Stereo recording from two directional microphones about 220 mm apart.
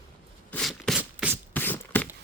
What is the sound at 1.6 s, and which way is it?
Beatboxing, 10° left (ahead or behind).